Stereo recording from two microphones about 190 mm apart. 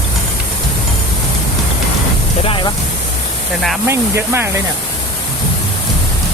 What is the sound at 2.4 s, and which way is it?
Speech, 25° left (ahead or behind).